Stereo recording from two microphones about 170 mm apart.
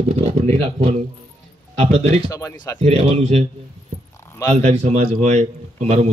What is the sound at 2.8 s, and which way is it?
Speech, 40° right (ahead or behind).